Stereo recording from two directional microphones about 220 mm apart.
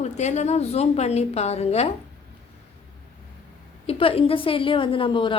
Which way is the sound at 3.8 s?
25° left (ahead or behind).